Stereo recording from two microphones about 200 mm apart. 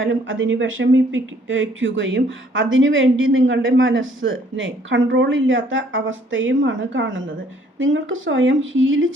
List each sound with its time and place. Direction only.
0.0 s speech: 75° right (ahead or behind)